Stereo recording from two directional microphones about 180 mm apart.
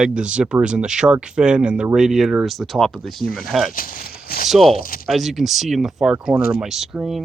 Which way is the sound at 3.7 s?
50° left (ahead or behind).